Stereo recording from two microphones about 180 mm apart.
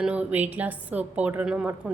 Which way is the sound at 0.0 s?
5° right (ahead or behind).